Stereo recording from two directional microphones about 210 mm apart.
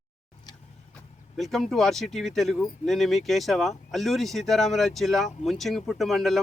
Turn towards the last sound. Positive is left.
turn(degrees=0)  # may be behind; listen again after turning